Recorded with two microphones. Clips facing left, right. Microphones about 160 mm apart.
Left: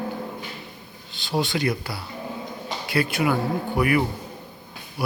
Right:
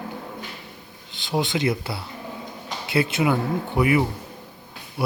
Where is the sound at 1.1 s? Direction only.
20° right (ahead or behind).